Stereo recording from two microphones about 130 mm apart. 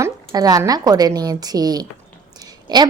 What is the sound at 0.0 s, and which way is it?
A woman's voice, 25° right (ahead or behind).